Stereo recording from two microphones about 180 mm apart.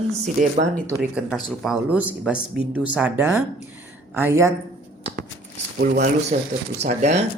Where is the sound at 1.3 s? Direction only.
5° right (ahead or behind).